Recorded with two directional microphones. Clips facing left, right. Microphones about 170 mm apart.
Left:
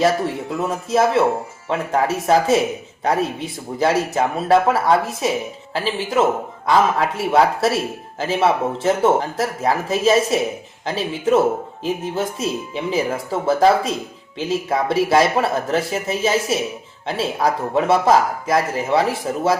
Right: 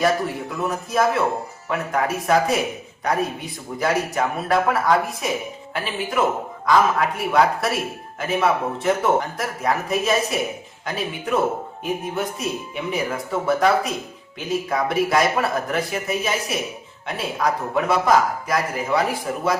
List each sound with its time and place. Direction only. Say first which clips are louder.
0.9 s speech: left 4 dB; 25° left (ahead or behind)